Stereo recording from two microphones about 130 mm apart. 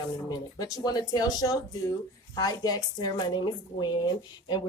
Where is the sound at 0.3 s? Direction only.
30° left (ahead or behind).